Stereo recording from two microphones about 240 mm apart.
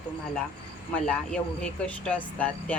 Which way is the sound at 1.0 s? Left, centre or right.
Centre.